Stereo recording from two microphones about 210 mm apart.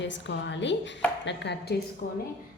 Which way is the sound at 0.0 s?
60° left (ahead or behind).